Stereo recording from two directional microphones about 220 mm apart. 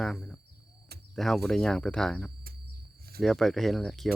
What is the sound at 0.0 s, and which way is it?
Speech, centre (ahead or behind).